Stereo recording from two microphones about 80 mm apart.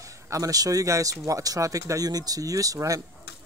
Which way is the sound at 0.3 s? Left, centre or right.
Right.